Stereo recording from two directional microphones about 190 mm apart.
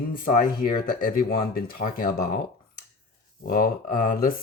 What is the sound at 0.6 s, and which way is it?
Speech, 45° left (ahead or behind).